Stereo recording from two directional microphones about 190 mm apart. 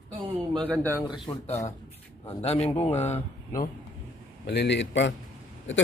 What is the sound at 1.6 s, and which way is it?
Speech, 35° left (ahead or behind).